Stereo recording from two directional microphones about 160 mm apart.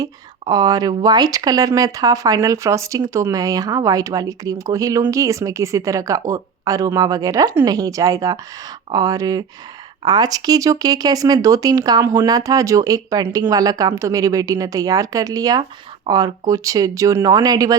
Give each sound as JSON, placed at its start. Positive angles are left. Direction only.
{"t": 0.0, "sound": "speech", "side_deg": -25}